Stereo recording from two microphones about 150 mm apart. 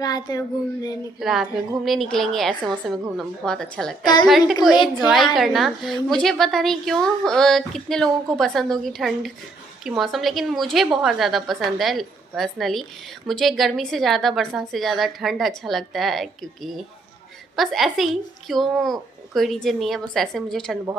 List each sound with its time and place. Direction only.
0.0 s speech: 25° left (ahead or behind)
1.2 s a woman's voice: 5° right (ahead or behind)